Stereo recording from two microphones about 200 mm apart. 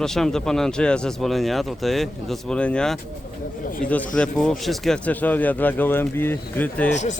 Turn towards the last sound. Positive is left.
turn(degrees=35)  # may be behind; listen again after turning